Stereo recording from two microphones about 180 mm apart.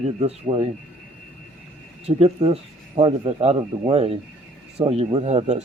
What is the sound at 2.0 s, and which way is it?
Speech, 35° right (ahead or behind).